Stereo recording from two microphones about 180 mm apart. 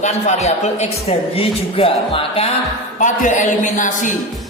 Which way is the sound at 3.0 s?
45° left (ahead or behind).